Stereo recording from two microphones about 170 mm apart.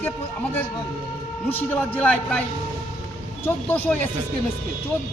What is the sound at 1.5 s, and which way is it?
Speech, 10° left (ahead or behind).